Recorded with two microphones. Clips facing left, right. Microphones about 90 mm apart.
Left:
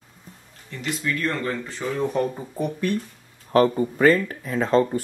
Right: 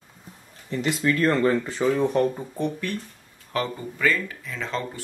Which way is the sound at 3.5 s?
40° left (ahead or behind).